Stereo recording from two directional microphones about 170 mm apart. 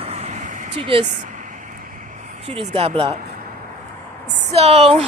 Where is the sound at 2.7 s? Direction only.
35° right (ahead or behind).